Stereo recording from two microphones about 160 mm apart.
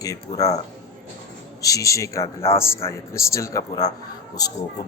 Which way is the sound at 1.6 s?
20° left (ahead or behind).